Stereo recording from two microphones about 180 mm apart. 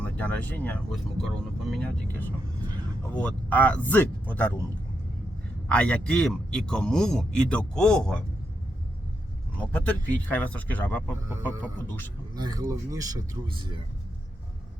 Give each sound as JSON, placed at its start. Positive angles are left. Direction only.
{"t": 0.0, "sound": "speech", "side_deg": 10}
{"t": 5.6, "sound": "a man's voice", "side_deg": 5}
{"t": 9.6, "sound": "speech", "side_deg": 10}
{"t": 12.3, "sound": "a man's voice", "side_deg": -20}